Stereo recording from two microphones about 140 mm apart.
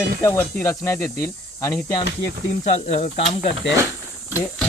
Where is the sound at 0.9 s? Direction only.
90° left.